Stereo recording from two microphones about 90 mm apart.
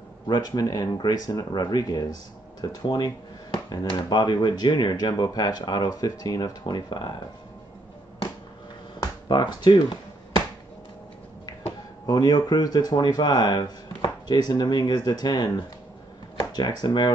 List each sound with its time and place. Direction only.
0.3 s speech: 45° left (ahead or behind)
9.0 s speech: 50° left (ahead or behind)
12.1 s speech: 50° left (ahead or behind)